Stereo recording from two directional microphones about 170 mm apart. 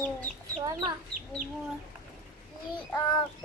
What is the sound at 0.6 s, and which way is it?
Chicken, 25° right (ahead or behind).